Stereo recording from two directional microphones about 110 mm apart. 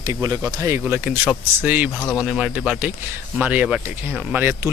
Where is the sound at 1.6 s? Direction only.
15° right (ahead or behind).